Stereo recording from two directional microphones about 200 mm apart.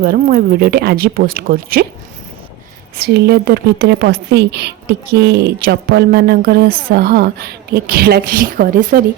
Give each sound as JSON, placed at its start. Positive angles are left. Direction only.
{"t": 0.3, "sound": "a woman's voice", "side_deg": -50}
{"t": 3.0, "sound": "a woman's voice", "side_deg": -55}